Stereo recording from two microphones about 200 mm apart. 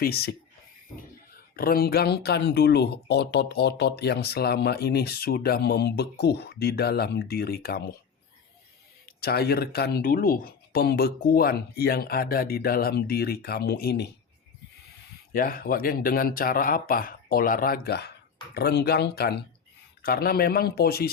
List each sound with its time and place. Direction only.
0.0 s speech: 50° left (ahead or behind)
1.5 s speech: 50° left (ahead or behind)
9.2 s speech: 50° left (ahead or behind)
15.3 s speech: 45° left (ahead or behind)